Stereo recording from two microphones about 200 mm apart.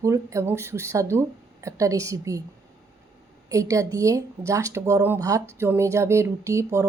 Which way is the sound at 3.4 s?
15° right (ahead or behind).